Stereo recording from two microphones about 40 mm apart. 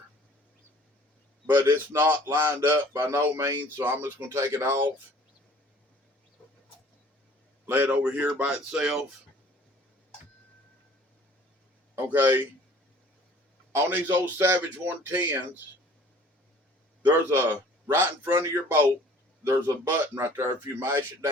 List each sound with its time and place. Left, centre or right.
1.5 s speech: right
7.6 s a sound: right
7.9 s speech: right
8.8 s speech: centre
12.0 s speech: right
13.7 s speech: right
14.3 s speech: right
17.1 s speech: right
19.9 s speech: right